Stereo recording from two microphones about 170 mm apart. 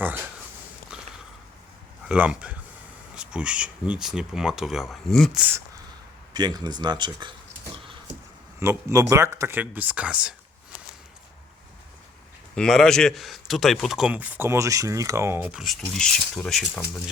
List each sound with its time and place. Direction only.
2.0 s speech: 5° right (ahead or behind)
6.3 s speech: 25° right (ahead or behind)
8.5 s speech: 15° right (ahead or behind)
12.5 s speech: 5° left (ahead or behind)